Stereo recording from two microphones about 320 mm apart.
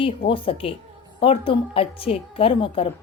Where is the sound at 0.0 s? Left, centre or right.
Centre.